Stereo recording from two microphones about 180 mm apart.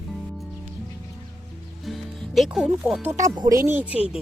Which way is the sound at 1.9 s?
Centre (ahead or behind).